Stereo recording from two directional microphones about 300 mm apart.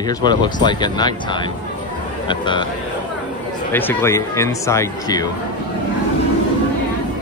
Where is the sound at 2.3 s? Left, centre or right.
Centre.